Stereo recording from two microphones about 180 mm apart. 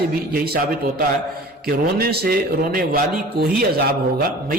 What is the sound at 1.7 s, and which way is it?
A man's voice, 55° right (ahead or behind).